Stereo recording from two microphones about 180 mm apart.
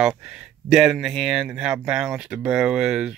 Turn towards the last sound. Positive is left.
turn(degrees=-5)  # may be behind; listen again after turning